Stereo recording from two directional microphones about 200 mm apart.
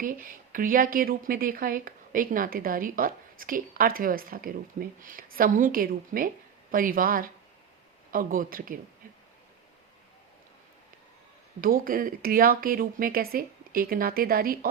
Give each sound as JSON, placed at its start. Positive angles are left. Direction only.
{"t": 0.0, "sound": "speech", "side_deg": -45}
{"t": 11.6, "sound": "speech", "side_deg": -45}